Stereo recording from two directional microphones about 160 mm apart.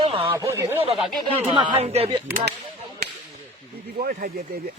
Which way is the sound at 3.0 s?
90° right.